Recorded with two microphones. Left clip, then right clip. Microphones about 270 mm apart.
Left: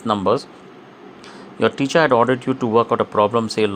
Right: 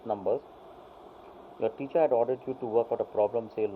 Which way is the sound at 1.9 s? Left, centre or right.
Left.